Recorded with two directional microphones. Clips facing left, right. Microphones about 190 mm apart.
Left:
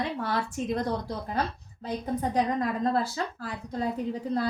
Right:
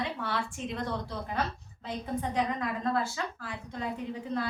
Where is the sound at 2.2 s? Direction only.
35° left (ahead or behind).